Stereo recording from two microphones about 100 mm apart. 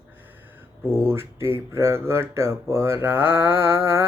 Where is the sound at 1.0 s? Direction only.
25° right (ahead or behind).